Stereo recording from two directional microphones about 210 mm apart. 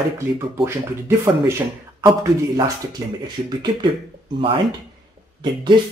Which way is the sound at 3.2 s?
20° right (ahead or behind).